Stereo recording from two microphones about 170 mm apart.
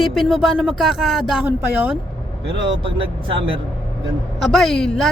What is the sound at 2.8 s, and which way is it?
Speech, 30° right (ahead or behind).